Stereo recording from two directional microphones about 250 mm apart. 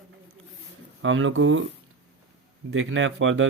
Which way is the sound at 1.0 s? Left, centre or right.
Right.